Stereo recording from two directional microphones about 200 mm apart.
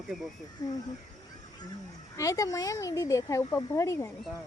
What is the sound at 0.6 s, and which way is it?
Speech, 20° left (ahead or behind).